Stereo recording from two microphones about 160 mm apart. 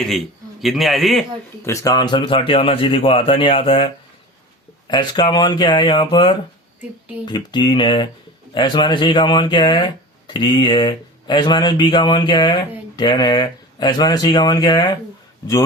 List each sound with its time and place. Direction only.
0.6 s a man's voice: centre (ahead or behind)
1.6 s speech: 20° left (ahead or behind)
4.9 s speech: 30° left (ahead or behind)